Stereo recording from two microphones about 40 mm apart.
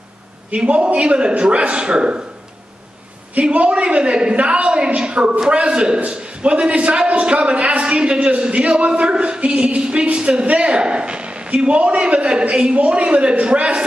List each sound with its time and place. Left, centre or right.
0.5 s a man's voice: right
3.5 s a man's voice: right